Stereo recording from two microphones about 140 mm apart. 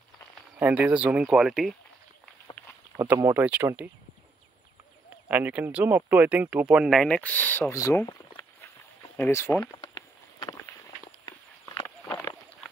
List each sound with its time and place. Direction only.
0.6 s speech: 10° right (ahead or behind)
3.0 s speech: 20° right (ahead or behind)
5.3 s speech: 10° right (ahead or behind); by 8.1 s 20° left (ahead or behind)
8.1 s a sound: 35° left (ahead or behind)
9.1 s a sound: 15° left (ahead or behind)
11.2 s walk: 25° left (ahead or behind)